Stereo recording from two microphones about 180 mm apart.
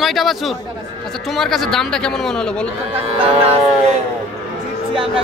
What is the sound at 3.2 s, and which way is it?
Speech, 35° right (ahead or behind).